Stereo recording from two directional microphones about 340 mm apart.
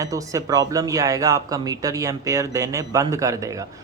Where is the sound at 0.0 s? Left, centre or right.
Centre.